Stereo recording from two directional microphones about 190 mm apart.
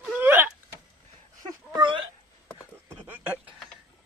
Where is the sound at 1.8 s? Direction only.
25° right (ahead or behind).